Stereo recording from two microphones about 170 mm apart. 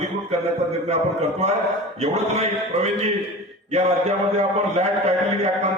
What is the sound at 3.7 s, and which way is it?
A man's voice, 40° right (ahead or behind).